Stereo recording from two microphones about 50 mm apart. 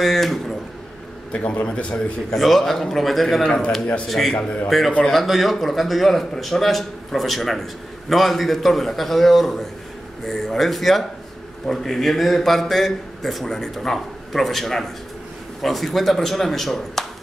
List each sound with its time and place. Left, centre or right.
0.0 s speech: centre
1.3 s a man's voice: left
2.3 s a man's voice: centre
3.4 s a man's voice: centre
4.1 s a man's voice: centre